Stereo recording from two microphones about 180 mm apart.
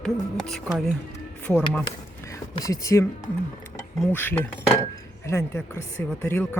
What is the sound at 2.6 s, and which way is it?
Speech, 20° left (ahead or behind).